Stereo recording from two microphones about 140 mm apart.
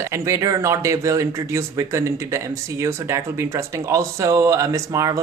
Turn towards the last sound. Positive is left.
turn(degrees=-25)  # may be behind; listen again after turning